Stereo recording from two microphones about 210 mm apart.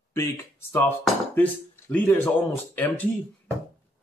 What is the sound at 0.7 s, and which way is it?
Speech, 10° left (ahead or behind).